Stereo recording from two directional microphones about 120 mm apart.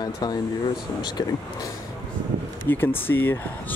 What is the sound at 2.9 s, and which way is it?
Speech, 15° left (ahead or behind).